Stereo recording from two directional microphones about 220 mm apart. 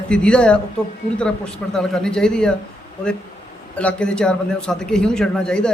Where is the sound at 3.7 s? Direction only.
5° left (ahead or behind).